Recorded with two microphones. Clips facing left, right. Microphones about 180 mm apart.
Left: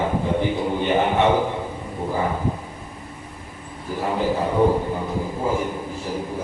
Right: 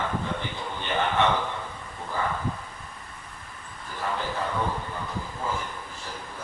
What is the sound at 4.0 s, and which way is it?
A man's voice, 15° left (ahead or behind).